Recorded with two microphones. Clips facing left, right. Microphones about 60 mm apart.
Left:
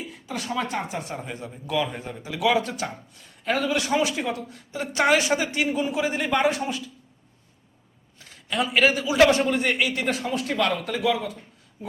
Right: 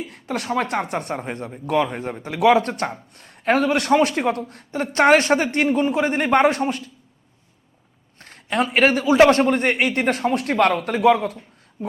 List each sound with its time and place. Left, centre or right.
0.0 s speech: right
1.2 s a man's voice: right
8.2 s a man's voice: right
11.8 s a sound: right